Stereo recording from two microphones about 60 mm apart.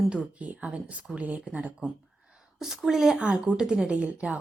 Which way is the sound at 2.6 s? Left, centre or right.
Centre.